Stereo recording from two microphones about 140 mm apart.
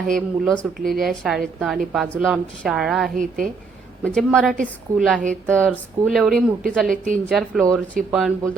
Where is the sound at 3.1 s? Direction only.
75° right (ahead or behind).